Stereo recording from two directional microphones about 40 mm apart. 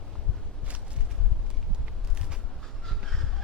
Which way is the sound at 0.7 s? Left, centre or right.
Right.